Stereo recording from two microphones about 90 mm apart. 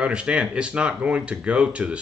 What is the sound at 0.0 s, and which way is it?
Speech, 10° right (ahead or behind).